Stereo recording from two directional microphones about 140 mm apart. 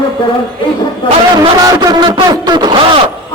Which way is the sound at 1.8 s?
30° right (ahead or behind).